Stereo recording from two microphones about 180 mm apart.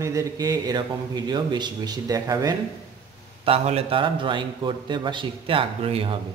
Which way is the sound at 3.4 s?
35° right (ahead or behind).